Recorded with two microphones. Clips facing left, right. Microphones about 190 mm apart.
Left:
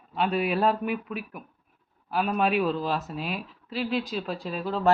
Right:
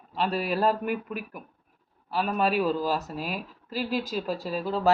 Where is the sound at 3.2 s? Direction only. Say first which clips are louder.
Even; 45° right (ahead or behind).